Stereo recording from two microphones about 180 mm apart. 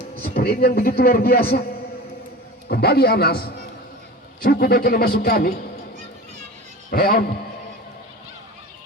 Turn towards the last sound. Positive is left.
turn(degrees=55)  # may be behind; listen again after turning